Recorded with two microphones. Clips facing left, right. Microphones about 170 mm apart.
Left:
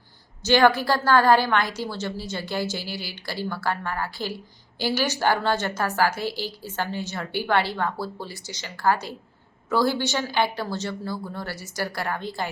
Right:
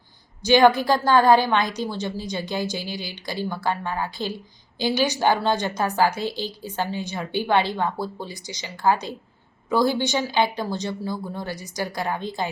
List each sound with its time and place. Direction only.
0.4 s a woman's voice: 15° right (ahead or behind)